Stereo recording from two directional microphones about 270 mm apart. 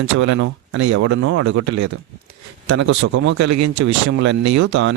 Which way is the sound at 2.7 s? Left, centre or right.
Right.